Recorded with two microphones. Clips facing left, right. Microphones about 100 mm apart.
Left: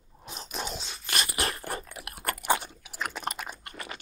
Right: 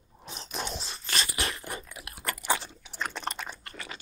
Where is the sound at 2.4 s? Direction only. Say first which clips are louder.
Left 3 dB; 20° left (ahead or behind).